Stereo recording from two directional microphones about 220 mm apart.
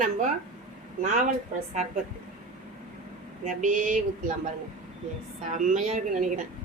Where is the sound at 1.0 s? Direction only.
30° right (ahead or behind).